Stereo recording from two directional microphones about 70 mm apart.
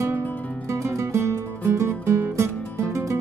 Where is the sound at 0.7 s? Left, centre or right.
Right.